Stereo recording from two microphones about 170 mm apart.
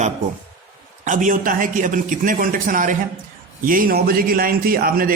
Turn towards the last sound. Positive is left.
turn(degrees=-60)  # may be behind; listen again after turning